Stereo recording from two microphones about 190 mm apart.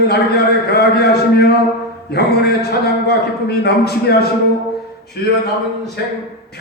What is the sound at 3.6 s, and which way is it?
Speech, 60° left (ahead or behind).